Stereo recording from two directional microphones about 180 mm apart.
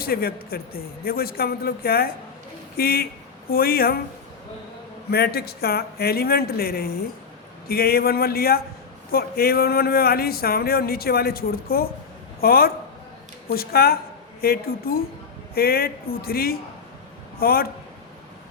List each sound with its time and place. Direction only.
0.0 s speech: 55° left (ahead or behind)
5.1 s speech: 60° left (ahead or behind)